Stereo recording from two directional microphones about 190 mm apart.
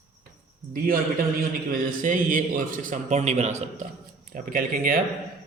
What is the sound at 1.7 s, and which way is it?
A man's voice, 45° right (ahead or behind).